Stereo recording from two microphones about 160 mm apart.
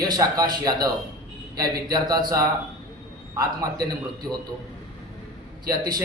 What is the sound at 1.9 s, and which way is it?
Speech, 25° right (ahead or behind).